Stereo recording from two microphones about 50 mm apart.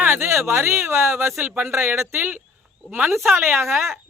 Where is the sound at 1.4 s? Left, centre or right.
Right.